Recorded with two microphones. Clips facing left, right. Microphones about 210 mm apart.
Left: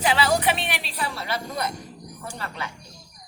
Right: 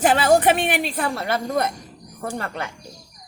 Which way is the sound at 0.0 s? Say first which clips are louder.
Right 6 dB; 50° right (ahead or behind).